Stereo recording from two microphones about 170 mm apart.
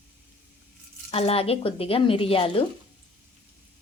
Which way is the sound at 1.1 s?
35° left (ahead or behind).